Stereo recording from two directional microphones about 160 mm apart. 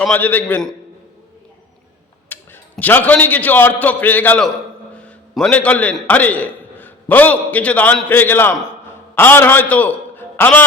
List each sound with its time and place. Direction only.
0.0 s a man's voice: 10° left (ahead or behind)
2.3 s a man's voice: 10° left (ahead or behind)